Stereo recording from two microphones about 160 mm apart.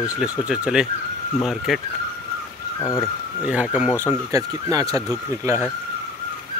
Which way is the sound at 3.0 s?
5° right (ahead or behind).